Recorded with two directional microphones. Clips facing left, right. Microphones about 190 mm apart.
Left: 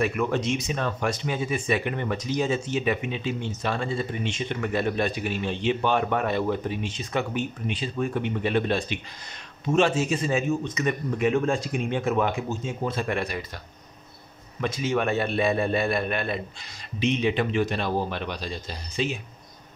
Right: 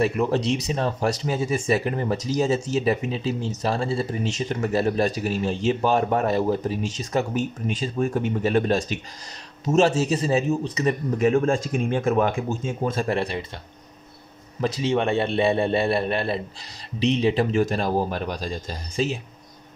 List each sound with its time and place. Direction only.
0.0 s speech: 35° right (ahead or behind)
13.1 s speech: 30° right (ahead or behind)
14.6 s speech: 30° right (ahead or behind)